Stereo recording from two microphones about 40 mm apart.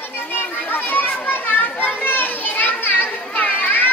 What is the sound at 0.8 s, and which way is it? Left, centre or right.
Children playing, left.